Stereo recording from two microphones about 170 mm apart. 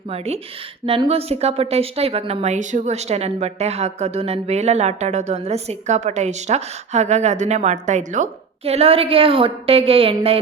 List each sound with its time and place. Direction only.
0.9 s a woman's voice: 35° right (ahead or behind)